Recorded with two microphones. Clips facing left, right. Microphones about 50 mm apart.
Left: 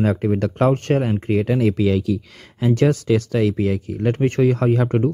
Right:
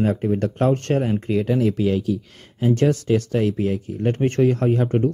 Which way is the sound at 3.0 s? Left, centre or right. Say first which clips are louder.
Left 2 dB; left.